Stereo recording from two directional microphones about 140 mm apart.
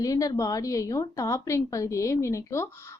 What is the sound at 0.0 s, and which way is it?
A woman's voice, 25° left (ahead or behind).